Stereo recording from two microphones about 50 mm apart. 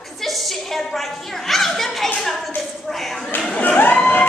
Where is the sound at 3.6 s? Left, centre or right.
Left.